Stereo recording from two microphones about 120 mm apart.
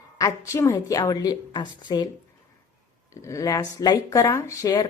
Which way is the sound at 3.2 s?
25° left (ahead or behind).